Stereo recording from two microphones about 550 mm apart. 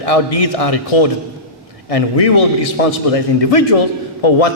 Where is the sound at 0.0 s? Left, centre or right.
Left.